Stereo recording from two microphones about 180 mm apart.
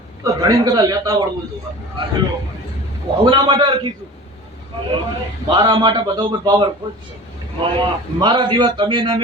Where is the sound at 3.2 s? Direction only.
25° right (ahead or behind).